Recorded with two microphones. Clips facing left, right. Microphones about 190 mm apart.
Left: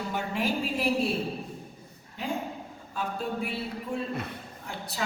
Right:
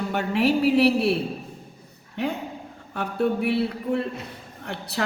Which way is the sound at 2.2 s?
70° right (ahead or behind).